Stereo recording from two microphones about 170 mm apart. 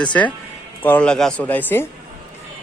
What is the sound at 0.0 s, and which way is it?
A man's voice, 5° left (ahead or behind).